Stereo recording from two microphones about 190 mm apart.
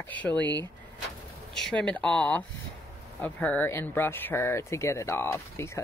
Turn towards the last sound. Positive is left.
turn(degrees=15)  # may be behind; listen again after turning